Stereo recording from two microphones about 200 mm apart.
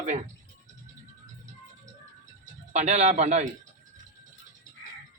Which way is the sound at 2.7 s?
35° right (ahead or behind).